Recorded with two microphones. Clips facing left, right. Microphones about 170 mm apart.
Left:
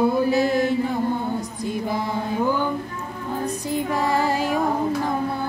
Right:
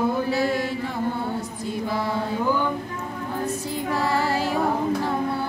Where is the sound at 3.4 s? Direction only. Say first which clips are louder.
Left 4 dB; 15° left (ahead or behind).